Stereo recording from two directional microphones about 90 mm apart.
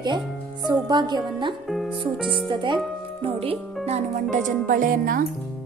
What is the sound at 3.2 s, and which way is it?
Speech, 90° right.